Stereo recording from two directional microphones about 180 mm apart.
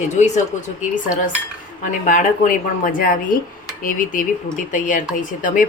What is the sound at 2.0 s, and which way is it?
Speech, 50° left (ahead or behind).